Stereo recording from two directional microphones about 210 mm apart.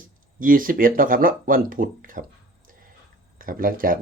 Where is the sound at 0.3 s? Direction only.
40° right (ahead or behind).